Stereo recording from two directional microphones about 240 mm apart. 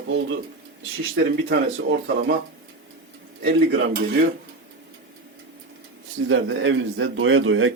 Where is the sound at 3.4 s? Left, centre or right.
Right.